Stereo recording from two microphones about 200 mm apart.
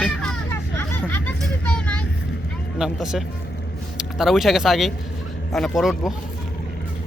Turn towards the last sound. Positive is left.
turn(degrees=0)  # may be behind; listen again after turning